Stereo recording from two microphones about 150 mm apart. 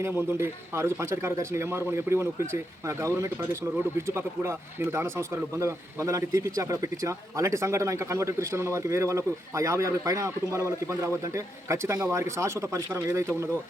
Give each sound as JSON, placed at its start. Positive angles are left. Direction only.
{"t": 0.0, "sound": "speech", "side_deg": -15}